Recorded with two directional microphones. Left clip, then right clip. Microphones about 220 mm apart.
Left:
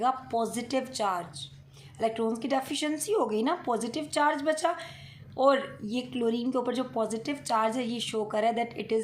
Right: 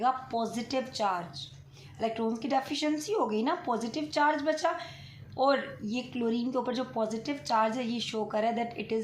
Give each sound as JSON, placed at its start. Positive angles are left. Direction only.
{"t": 0.0, "sound": "speech", "side_deg": 30}